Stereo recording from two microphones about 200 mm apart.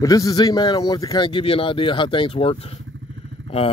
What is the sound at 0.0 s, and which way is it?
Speech, 15° left (ahead or behind).